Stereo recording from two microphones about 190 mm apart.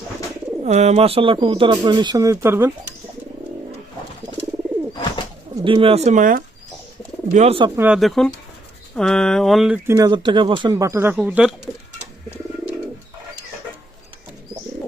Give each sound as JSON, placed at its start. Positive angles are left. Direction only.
{"t": 0.6, "sound": "speech", "side_deg": -35}
{"t": 5.5, "sound": "speech", "side_deg": -25}
{"t": 7.3, "sound": "speech", "side_deg": -30}
{"t": 7.8, "sound": "a sound", "side_deg": -5}
{"t": 9.9, "sound": "speech", "side_deg": -20}